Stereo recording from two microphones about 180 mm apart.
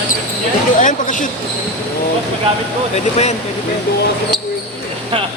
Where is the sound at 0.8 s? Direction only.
45° left (ahead or behind).